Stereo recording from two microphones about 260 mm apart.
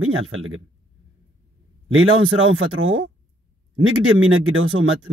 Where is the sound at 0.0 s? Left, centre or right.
Right.